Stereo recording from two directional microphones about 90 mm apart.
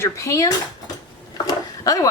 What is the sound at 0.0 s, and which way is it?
Speech, 35° left (ahead or behind).